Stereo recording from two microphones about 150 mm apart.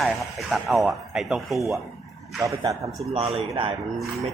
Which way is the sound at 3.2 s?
40° right (ahead or behind).